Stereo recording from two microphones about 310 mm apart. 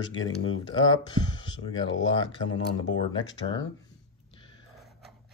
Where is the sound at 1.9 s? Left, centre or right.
Left.